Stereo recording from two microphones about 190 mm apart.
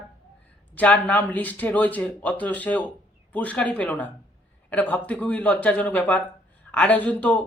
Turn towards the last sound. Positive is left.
turn(degrees=10)  # may be behind; listen again after turning